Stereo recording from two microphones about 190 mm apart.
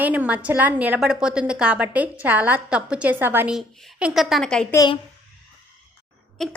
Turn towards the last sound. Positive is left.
turn(degrees=0)  # may be behind; listen again after turning